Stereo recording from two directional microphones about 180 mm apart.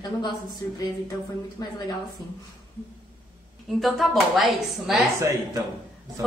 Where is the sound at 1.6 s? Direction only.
20° left (ahead or behind).